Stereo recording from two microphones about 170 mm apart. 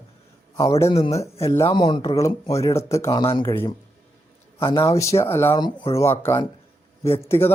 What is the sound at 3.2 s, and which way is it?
Speech, 30° left (ahead or behind).